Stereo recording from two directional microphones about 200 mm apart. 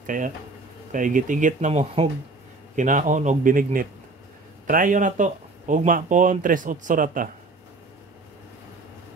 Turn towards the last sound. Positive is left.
turn(degrees=-40)  # may be behind; listen again after turning